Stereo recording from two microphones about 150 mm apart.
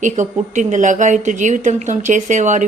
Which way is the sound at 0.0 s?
55° right (ahead or behind).